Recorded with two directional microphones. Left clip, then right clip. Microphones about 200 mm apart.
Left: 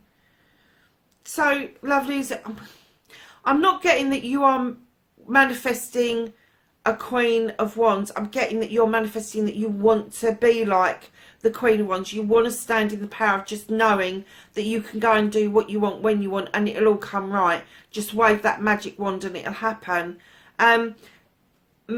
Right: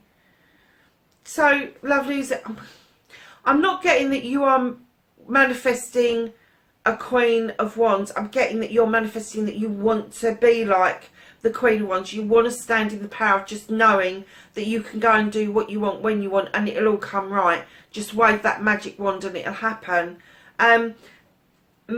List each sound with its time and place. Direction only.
1.2 s a woman's voice: 45° left (ahead or behind)